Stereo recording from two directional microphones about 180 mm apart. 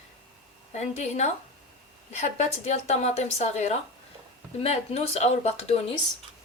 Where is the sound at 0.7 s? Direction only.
40° left (ahead or behind).